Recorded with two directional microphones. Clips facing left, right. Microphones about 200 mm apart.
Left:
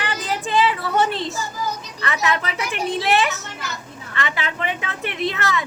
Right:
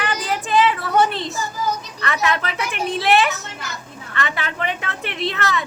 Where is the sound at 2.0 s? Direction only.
20° left (ahead or behind).